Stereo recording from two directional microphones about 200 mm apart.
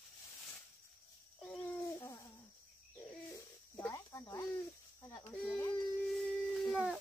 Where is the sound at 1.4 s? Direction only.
5° left (ahead or behind).